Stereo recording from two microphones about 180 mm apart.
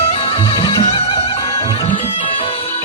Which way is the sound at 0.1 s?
30° left (ahead or behind).